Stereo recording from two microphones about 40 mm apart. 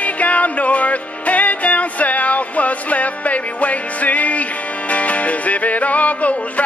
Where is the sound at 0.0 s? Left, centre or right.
Left.